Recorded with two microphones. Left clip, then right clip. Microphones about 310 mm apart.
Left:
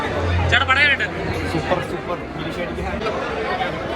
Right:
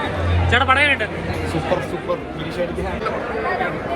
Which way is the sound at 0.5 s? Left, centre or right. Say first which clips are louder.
Right 1 dB; centre.